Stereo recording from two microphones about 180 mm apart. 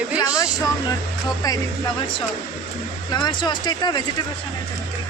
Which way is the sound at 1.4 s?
20° left (ahead or behind).